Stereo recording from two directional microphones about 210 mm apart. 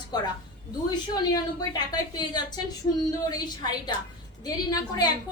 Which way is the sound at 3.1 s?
20° left (ahead or behind).